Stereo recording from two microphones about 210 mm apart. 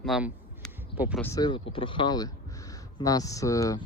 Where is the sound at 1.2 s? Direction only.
20° left (ahead or behind).